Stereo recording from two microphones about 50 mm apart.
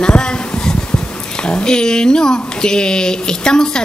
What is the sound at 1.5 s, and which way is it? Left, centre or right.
Speech, centre.